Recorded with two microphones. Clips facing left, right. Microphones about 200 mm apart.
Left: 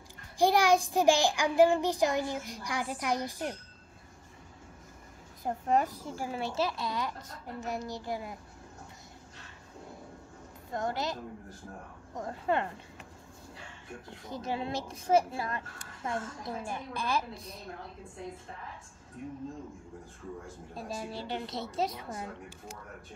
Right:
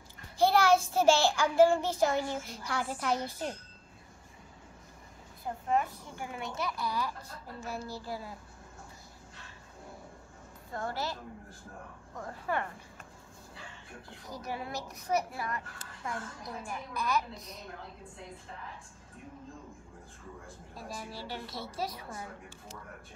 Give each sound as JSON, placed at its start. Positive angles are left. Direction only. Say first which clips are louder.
{"t": 0.4, "sound": "a child's voice", "louder": "even", "side_deg": 15}
{"t": 5.4, "sound": "a child's voice", "louder": "left 3 dB", "side_deg": 40}
{"t": 10.7, "sound": "a child's voice", "louder": "left 3 dB", "side_deg": 20}
{"t": 14.2, "sound": "a child's voice", "louder": "left 4 dB", "side_deg": 25}
{"t": 20.7, "sound": "a child's voice", "louder": "left 4 dB", "side_deg": 25}